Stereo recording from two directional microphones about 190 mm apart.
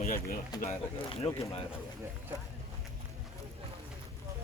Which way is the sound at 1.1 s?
30° left (ahead or behind).